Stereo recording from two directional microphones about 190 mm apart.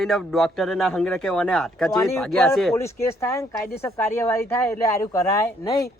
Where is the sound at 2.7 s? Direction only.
15° left (ahead or behind).